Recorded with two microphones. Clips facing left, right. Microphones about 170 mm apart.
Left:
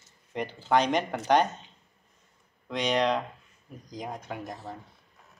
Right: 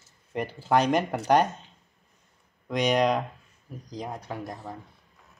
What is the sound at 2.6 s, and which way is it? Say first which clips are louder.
Speech: right 3 dB; 10° right (ahead or behind).